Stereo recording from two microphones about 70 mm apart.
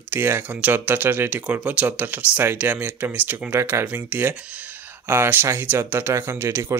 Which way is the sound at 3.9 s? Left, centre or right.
Right.